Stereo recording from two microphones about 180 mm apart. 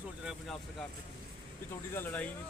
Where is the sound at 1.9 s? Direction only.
10° left (ahead or behind).